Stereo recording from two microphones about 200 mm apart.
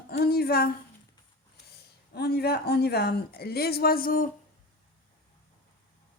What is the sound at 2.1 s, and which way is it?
A woman's voice, 55° left (ahead or behind).